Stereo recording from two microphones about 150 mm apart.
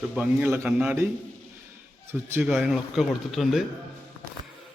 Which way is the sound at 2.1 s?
15° right (ahead or behind).